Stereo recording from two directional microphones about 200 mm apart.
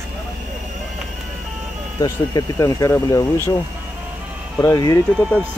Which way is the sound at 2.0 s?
15° left (ahead or behind).